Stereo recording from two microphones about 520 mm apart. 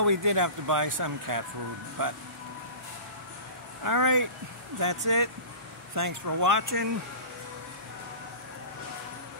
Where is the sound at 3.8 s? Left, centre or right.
Right.